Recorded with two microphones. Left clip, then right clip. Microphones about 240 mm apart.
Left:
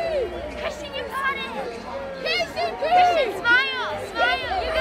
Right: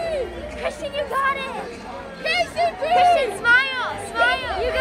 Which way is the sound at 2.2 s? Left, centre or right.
Right.